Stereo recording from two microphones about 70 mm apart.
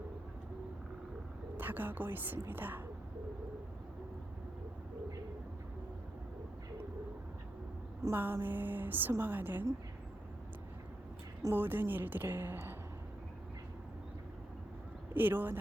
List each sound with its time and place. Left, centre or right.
1.5 s a woman's voice: right
8.1 s a woman's voice: right
11.5 s a woman's voice: right
15.1 s speech: right